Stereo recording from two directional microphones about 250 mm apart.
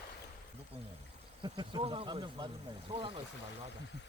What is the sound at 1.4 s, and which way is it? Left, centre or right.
Speech, centre.